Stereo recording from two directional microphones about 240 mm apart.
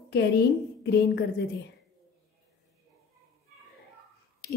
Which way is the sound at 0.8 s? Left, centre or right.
Left.